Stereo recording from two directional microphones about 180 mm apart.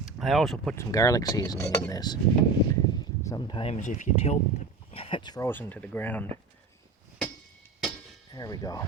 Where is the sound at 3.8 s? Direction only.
45° left (ahead or behind).